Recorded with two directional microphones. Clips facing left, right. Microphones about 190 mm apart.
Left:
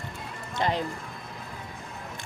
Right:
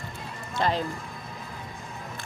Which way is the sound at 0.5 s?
15° left (ahead or behind).